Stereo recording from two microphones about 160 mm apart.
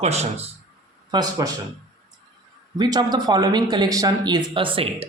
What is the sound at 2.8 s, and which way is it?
Speech, 25° right (ahead or behind).